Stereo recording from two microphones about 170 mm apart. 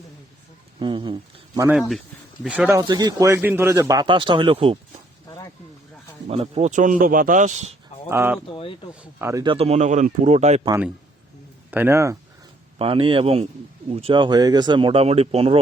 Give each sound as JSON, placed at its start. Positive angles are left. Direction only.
{"t": 0.8, "sound": "speech", "side_deg": -25}
{"t": 2.4, "sound": "speech", "side_deg": -5}
{"t": 2.8, "sound": "speech", "side_deg": -25}
{"t": 4.0, "sound": "speech", "side_deg": -30}
{"t": 6.2, "sound": "a man's voice", "side_deg": -40}
{"t": 8.1, "sound": "speech", "side_deg": -15}
{"t": 8.4, "sound": "speech", "side_deg": 30}
{"t": 9.0, "sound": "speech", "side_deg": -15}
{"t": 9.4, "sound": "speech", "side_deg": -30}
{"t": 11.7, "sound": "speech", "side_deg": -15}
{"t": 12.8, "sound": "speech", "side_deg": -30}